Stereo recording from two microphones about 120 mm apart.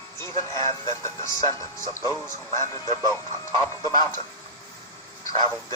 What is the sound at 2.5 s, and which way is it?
Speech, 30° left (ahead or behind).